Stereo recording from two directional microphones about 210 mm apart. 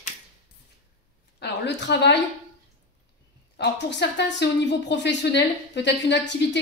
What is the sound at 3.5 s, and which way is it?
Speech, 55° left (ahead or behind).